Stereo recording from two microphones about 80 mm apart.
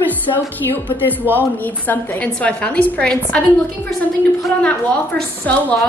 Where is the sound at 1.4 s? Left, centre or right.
Left.